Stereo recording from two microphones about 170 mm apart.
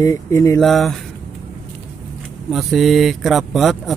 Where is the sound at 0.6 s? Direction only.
Centre (ahead or behind).